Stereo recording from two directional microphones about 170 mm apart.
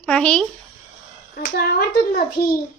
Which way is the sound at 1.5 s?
65° left (ahead or behind).